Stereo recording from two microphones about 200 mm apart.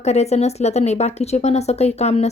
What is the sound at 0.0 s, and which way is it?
Speech, 35° left (ahead or behind).